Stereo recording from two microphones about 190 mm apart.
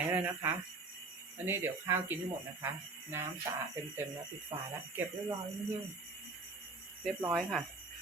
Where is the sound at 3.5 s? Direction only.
15° right (ahead or behind).